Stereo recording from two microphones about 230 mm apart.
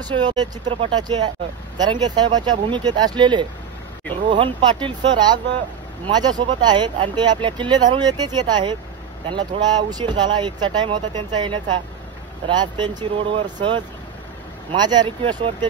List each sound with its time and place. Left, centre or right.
0.0 s speech: centre
9.8 s speech: centre